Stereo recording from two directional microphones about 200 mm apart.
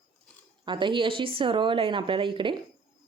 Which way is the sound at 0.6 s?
25° right (ahead or behind).